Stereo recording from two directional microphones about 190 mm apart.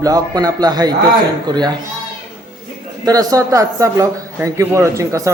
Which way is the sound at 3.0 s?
20° right (ahead or behind).